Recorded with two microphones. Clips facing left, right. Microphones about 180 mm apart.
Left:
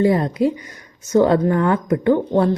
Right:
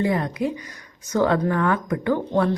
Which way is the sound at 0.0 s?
30° left (ahead or behind).